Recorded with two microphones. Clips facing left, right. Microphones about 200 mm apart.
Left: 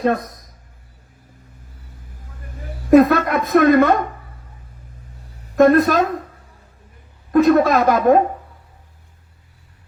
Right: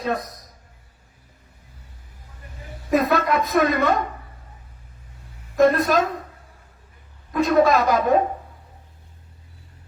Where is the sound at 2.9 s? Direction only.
50° left (ahead or behind).